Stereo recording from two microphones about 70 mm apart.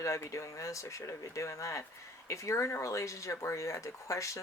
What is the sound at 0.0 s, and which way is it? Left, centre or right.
Speech, left.